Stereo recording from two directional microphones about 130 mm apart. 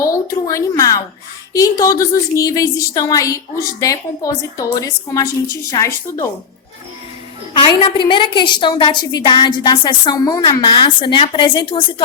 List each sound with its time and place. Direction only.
0.0 s a woman's voice: 25° left (ahead or behind)
7.5 s a woman's voice: 40° left (ahead or behind)